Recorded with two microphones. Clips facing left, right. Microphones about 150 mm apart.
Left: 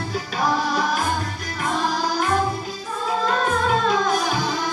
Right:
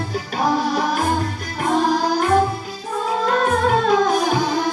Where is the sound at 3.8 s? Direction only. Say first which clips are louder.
Right 4 dB; 55° right (ahead or behind).